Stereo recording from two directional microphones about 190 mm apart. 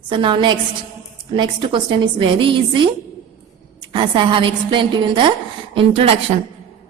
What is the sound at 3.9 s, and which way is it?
A woman's voice, 25° right (ahead or behind).